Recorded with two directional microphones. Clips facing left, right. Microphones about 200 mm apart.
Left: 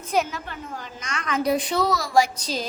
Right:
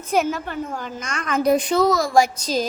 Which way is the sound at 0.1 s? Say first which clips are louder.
Right 4 dB; 50° right (ahead or behind).